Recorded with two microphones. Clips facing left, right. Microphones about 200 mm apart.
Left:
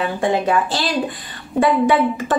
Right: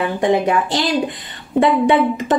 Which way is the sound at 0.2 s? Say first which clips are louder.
Right 2 dB; 20° right (ahead or behind).